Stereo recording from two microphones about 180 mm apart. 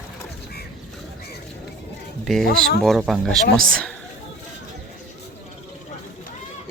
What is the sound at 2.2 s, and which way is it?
Speech, centre (ahead or behind).